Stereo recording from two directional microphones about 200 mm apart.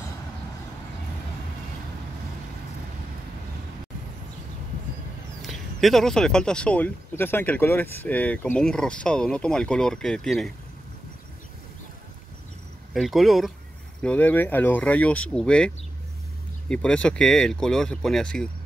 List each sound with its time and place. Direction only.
5.4 s speech: centre (ahead or behind)
12.9 s speech: centre (ahead or behind)